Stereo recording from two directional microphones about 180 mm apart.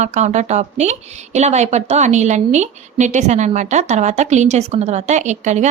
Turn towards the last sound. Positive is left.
turn(degrees=-40)  # may be behind; listen again after turning